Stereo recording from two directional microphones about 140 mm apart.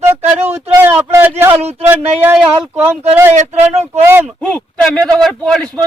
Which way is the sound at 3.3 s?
55° right (ahead or behind).